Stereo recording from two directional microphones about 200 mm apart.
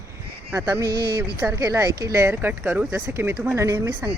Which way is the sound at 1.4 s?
15° right (ahead or behind).